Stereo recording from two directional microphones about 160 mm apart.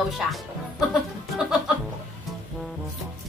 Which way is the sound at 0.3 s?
Centre (ahead or behind).